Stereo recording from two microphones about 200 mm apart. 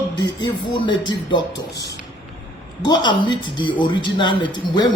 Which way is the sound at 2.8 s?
20° left (ahead or behind).